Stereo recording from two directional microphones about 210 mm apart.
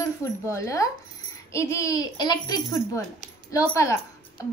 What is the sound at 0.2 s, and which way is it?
A woman's voice, 15° left (ahead or behind).